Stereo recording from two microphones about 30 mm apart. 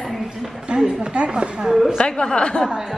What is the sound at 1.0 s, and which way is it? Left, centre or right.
Speech, right.